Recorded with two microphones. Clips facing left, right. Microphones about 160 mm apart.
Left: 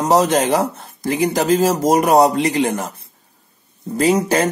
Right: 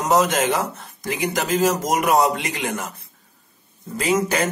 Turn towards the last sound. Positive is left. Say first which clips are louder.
# left 5 dB
turn(degrees=35)  # may be behind; listen again after turning